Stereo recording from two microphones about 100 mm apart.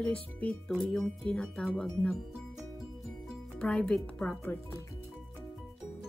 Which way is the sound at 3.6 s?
10° left (ahead or behind).